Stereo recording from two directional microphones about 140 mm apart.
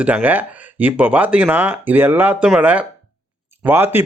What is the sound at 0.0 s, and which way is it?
A man's voice, 10° right (ahead or behind).